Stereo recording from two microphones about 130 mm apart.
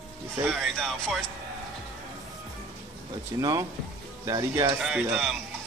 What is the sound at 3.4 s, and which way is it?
Speech, 25° right (ahead or behind).